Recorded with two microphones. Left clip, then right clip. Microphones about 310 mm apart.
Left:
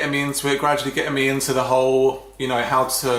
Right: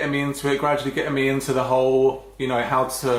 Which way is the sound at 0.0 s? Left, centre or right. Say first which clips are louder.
Left 2 dB; centre.